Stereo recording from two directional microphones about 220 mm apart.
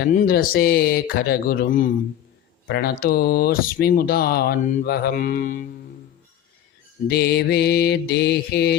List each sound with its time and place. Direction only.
0.0 s speech: 40° left (ahead or behind)
7.1 s speech: 45° left (ahead or behind)